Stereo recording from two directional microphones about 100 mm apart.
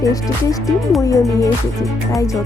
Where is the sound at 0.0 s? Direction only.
35° left (ahead or behind).